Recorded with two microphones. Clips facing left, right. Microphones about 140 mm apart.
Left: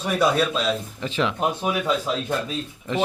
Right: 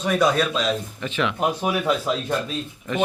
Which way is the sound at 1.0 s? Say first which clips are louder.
Even; 30° left (ahead or behind).